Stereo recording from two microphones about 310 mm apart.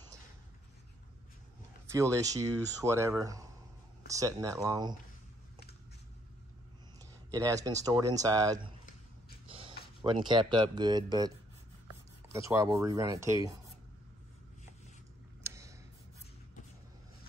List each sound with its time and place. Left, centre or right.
1.9 s speech: centre
7.0 s speech: centre
9.5 s a sound: centre
10.0 s speech: centre
15.4 s tick-tock: centre